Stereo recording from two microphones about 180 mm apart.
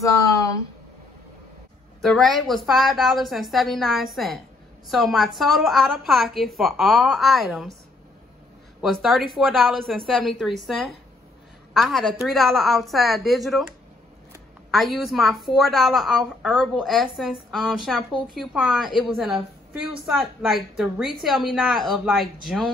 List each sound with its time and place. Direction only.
0.0 s a sound: 15° left (ahead or behind)
2.0 s a woman's voice: centre (ahead or behind)
8.8 s a woman's voice: centre (ahead or behind)
11.7 s a woman's voice: centre (ahead or behind)
14.7 s a woman's voice: centre (ahead or behind)